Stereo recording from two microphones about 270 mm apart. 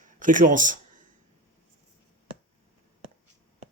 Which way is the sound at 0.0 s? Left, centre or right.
Right.